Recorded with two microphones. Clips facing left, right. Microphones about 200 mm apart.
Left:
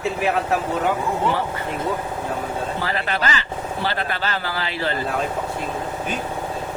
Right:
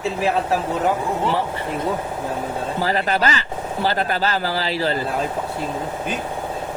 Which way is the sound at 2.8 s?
40° right (ahead or behind).